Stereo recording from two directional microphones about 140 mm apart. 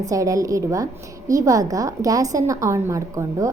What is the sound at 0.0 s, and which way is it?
A woman's voice, 25° right (ahead or behind).